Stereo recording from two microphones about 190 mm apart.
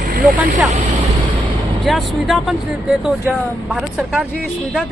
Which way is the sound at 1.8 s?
Centre (ahead or behind).